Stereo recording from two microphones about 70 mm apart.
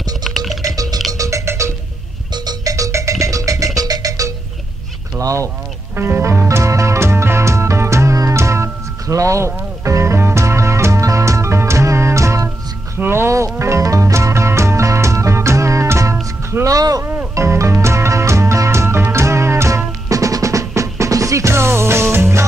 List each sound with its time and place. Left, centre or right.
1.1 s music: right
2.3 s music: right
2.7 s music: right
5.2 s speech: right
5.9 s music: right
16.6 s a sound: right
17.4 s music: right
20.1 s music: right